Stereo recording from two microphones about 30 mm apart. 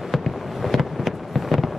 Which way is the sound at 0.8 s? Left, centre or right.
Centre.